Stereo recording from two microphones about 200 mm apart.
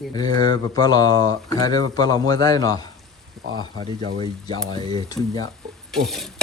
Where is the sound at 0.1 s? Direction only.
20° left (ahead or behind).